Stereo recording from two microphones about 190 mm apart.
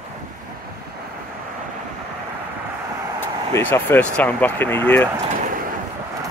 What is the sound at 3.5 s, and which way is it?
Speech, 10° left (ahead or behind).